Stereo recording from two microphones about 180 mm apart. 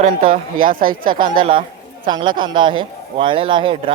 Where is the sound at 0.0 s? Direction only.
50° right (ahead or behind).